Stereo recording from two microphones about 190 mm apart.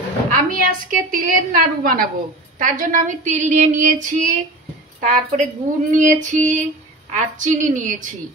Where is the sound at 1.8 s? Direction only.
50° right (ahead or behind).